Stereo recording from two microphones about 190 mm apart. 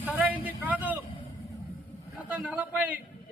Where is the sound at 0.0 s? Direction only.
10° right (ahead or behind).